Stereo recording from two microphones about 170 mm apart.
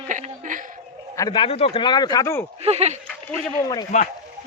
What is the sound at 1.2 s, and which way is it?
A man's voice, 30° left (ahead or behind).